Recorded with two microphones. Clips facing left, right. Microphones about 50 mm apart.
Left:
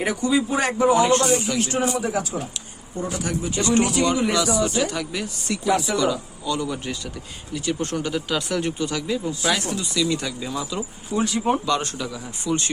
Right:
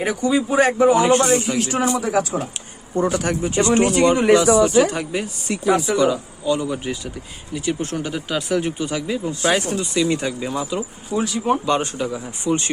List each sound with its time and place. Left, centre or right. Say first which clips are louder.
0.2 s speech: right 6 dB; centre
1.5 s a man's voice: right 3 dB; right
3.4 s speech: right 3 dB; right
9.4 s speech: right 4 dB; right
11.1 s speech: right 1 dB; centre
11.6 s speech: right 3 dB; right